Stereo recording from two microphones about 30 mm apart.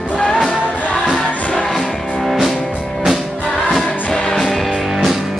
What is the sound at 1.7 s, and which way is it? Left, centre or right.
Music, centre.